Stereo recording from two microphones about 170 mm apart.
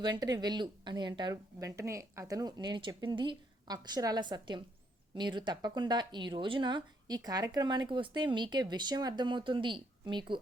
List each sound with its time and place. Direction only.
0.0 s a woman's voice: 25° right (ahead or behind)